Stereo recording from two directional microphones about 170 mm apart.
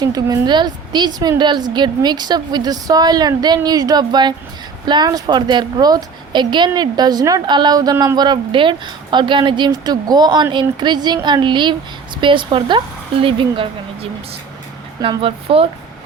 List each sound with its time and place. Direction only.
0.0 s a woman's voice: 20° right (ahead or behind)